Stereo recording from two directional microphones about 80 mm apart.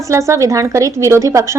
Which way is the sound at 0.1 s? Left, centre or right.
Right.